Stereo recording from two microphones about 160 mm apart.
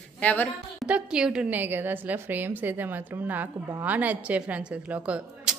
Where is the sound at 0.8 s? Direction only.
5° right (ahead or behind).